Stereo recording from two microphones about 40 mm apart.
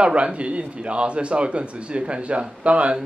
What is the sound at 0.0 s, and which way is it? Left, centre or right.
A man's voice, right.